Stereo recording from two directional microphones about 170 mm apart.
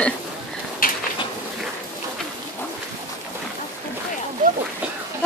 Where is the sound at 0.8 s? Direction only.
55° left (ahead or behind).